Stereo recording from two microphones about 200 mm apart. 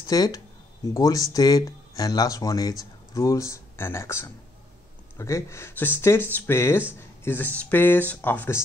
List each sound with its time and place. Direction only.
0.0 s speech: 20° left (ahead or behind)